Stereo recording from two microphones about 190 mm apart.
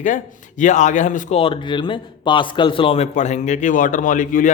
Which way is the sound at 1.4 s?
25° left (ahead or behind).